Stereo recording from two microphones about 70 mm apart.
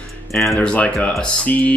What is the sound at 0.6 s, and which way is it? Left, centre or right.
Speech, centre.